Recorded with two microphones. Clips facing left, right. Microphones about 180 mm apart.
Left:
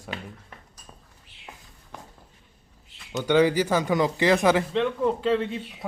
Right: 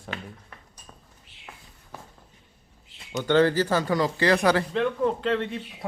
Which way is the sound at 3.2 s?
10° left (ahead or behind).